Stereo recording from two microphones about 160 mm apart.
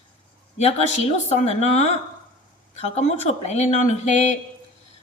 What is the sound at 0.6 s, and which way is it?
Speech, 40° left (ahead or behind).